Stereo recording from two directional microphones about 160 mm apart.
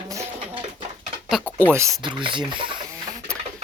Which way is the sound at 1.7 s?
15° right (ahead or behind).